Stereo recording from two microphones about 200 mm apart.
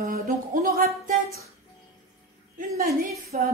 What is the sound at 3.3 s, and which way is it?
Speech, 40° right (ahead or behind).